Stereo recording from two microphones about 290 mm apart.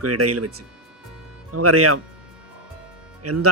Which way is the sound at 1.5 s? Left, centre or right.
Right.